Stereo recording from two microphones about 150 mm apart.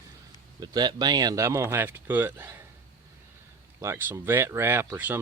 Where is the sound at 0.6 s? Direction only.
30° right (ahead or behind); by 2.6 s 10° right (ahead or behind).